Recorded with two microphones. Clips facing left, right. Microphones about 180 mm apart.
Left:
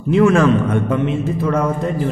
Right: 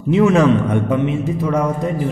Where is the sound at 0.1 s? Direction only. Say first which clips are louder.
Even; 20° right (ahead or behind).